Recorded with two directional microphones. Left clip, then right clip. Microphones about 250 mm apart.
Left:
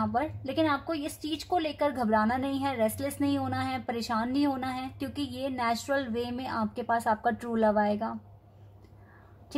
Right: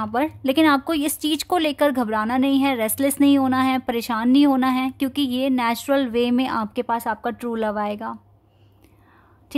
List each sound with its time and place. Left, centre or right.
0.0 s speech: right